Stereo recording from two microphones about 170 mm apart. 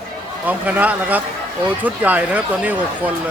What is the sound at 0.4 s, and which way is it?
Speech, 10° right (ahead or behind).